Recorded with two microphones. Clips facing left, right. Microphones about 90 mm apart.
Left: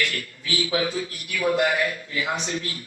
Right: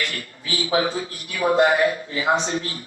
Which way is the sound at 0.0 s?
30° right (ahead or behind).